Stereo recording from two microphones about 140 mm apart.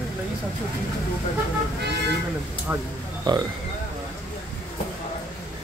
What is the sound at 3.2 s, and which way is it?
Speech, 30° right (ahead or behind).